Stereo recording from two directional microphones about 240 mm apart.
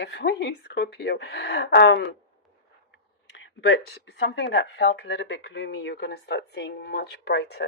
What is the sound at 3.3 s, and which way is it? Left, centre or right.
Speech, left.